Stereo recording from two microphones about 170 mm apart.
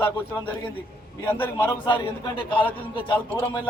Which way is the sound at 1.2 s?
10° left (ahead or behind).